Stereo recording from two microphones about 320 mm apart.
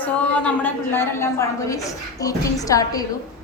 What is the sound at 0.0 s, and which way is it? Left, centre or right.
A woman's voice, centre.